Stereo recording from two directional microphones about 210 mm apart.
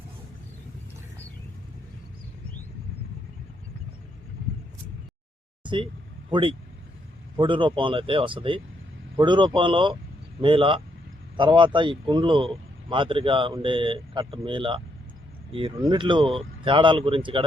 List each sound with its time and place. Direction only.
5.6 s speech: 25° right (ahead or behind)